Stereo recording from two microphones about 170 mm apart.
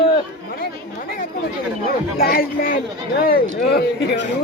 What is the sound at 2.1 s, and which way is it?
A man's voice, 60° left (ahead or behind).